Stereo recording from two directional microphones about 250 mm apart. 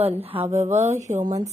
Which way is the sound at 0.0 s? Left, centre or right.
Right.